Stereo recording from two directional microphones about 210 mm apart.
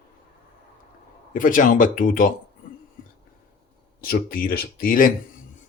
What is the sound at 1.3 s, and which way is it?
Speech, 40° left (ahead or behind).